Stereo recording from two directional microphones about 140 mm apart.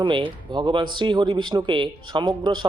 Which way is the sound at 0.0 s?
35° right (ahead or behind).